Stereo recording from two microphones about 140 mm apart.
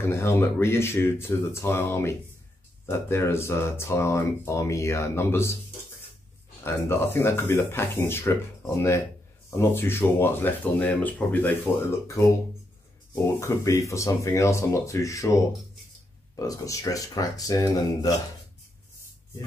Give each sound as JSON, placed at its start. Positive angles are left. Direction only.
{"t": 0.0, "sound": "speech", "side_deg": 20}
{"t": 6.6, "sound": "speech", "side_deg": 15}